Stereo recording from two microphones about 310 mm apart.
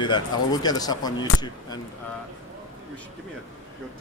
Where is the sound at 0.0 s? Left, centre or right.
Centre.